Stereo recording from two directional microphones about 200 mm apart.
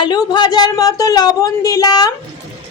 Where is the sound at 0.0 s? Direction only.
20° left (ahead or behind).